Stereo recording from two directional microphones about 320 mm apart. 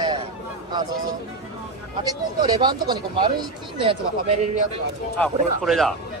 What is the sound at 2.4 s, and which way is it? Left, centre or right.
Speech, centre.